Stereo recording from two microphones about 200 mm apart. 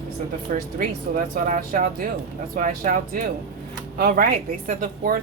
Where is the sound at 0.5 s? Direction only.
45° right (ahead or behind).